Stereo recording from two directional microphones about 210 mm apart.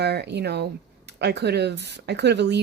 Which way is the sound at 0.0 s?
50° right (ahead or behind).